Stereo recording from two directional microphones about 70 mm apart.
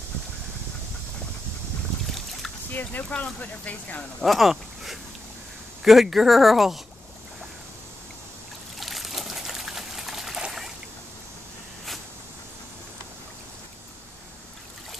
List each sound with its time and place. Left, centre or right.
2.7 s speech: left
4.2 s speech: centre
8.7 s trickle: centre